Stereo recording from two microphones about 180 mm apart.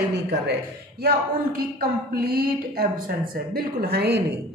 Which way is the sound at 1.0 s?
55° right (ahead or behind).